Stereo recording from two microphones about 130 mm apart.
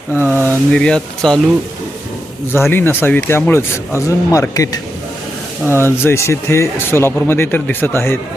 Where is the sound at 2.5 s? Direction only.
15° left (ahead or behind).